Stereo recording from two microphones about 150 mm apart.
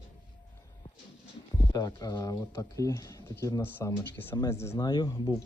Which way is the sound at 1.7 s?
25° left (ahead or behind).